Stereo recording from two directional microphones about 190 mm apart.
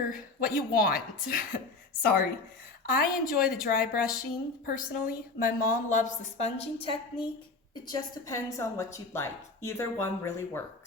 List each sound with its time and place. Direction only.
0.4 s a woman's voice: 50° left (ahead or behind)
2.8 s a woman's voice: 50° left (ahead or behind); by 10.6 s 15° left (ahead or behind)